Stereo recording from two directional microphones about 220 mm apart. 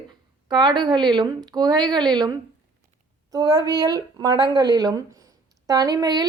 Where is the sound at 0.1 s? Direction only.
20° right (ahead or behind).